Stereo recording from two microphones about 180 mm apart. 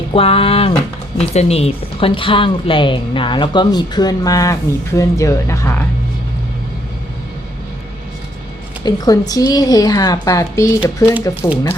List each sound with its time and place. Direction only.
0.1 s a woman's voice: 30° left (ahead or behind); by 5.8 s 15° left (ahead or behind)
8.8 s a woman's voice: 20° left (ahead or behind)